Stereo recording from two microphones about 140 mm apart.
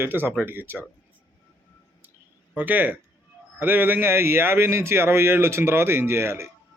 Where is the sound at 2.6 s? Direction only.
15° right (ahead or behind).